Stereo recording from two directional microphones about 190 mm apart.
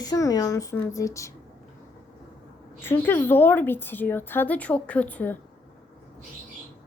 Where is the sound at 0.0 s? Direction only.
20° left (ahead or behind).